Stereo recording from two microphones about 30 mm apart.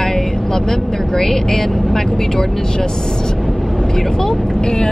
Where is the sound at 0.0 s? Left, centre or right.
Centre.